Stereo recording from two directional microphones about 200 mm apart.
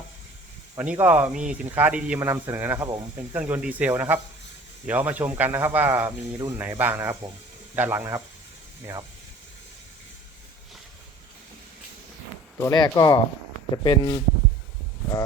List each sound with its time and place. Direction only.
0.8 s speech: 10° right (ahead or behind)
12.5 s speech: 15° left (ahead or behind)